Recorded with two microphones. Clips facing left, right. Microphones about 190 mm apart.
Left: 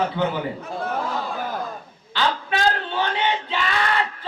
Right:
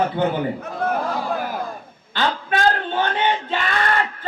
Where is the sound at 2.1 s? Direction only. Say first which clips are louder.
Right 1 dB; 50° right (ahead or behind).